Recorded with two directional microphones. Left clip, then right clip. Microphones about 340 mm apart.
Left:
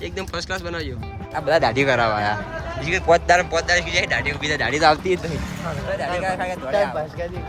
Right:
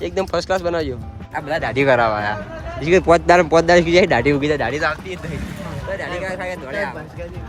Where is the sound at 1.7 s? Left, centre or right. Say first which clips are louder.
Right 3 dB; centre.